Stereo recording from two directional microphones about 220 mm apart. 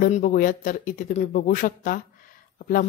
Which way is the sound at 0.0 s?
40° left (ahead or behind).